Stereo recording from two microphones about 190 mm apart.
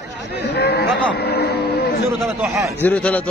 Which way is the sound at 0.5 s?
60° left (ahead or behind).